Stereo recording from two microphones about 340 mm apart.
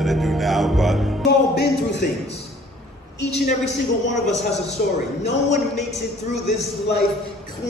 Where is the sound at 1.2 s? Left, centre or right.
Left.